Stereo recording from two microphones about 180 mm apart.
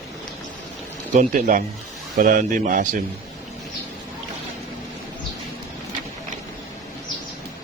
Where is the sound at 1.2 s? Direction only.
45° right (ahead or behind).